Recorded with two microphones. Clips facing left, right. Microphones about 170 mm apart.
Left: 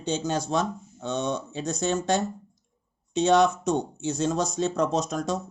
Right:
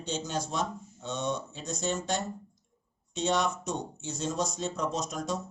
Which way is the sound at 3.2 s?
75° left (ahead or behind).